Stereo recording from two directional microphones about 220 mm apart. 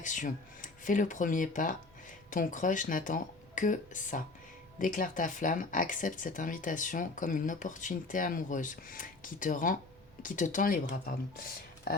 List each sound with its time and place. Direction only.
0.0 s speech: 35° left (ahead or behind)